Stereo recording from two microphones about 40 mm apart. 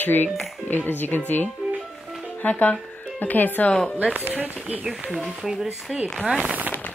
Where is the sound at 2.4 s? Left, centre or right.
Left.